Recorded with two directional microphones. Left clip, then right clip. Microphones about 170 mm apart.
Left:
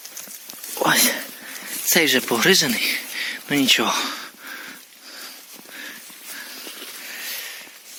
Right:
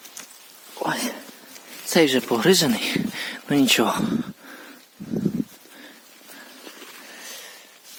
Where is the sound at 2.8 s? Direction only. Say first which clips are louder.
Left 3 dB; 45° right (ahead or behind).